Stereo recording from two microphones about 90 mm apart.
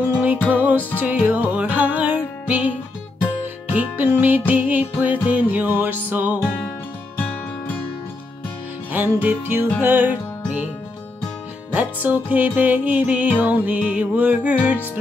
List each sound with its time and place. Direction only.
0.5 s music: 15° right (ahead or behind)
3.7 s music: 20° right (ahead or behind)
7.2 s music: 20° left (ahead or behind)
8.9 s music: 20° right (ahead or behind)
11.7 s music: 20° right (ahead or behind)